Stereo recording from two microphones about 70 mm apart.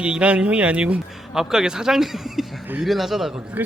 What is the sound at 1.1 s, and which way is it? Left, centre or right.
A man's voice, centre.